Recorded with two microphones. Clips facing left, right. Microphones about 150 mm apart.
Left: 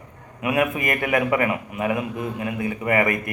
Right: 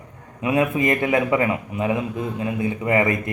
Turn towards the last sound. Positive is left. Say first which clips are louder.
# right 1 dB
turn(degrees=-25)  # may be behind; listen again after turning